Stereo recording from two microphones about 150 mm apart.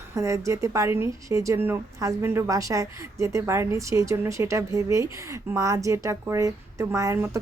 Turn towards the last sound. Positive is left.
turn(degrees=-20)  # may be behind; listen again after turning